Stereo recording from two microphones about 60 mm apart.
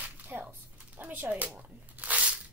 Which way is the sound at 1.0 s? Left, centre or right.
Right.